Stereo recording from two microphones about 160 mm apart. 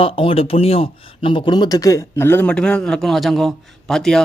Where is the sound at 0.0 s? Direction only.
35° left (ahead or behind).